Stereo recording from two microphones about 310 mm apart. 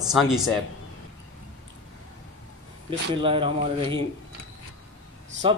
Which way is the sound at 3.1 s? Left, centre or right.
Centre.